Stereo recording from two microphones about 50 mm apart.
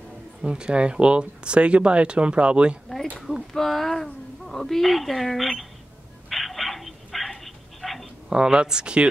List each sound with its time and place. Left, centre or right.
0.4 s speech: centre
3.5 s a woman's voice: centre
6.2 s dog: centre
8.3 s speech: centre